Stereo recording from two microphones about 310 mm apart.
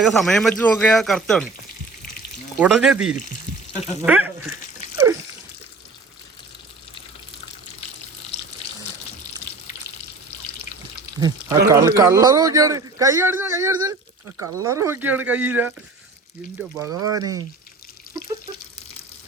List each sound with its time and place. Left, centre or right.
0.0 s speech: centre
2.6 s speech: centre
3.2 s frying: left
4.0 s speech: centre
11.2 s speech: centre